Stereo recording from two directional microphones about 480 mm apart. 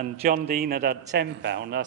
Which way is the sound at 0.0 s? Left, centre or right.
Centre.